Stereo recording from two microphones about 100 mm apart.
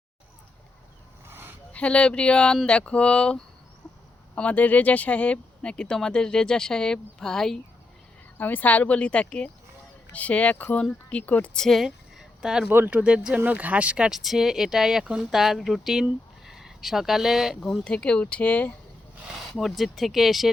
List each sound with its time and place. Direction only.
1.3 s a sound: 20° right (ahead or behind)
1.7 s speech: 10° left (ahead or behind)
8.4 s speech: 20° left (ahead or behind); by 12.6 s 5° right (ahead or behind)
12.6 s speech: 20° right (ahead or behind); by 17.7 s 5° right (ahead or behind)
17.7 s speech: 10° left (ahead or behind)
19.4 s speech: centre (ahead or behind)